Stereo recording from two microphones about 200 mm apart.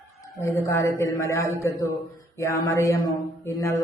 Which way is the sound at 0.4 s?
15° left (ahead or behind).